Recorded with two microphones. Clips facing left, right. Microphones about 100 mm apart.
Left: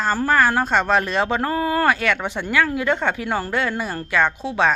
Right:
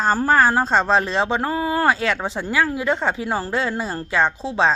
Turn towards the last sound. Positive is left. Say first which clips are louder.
# even
turn(degrees=-25)  # may be behind; listen again after turning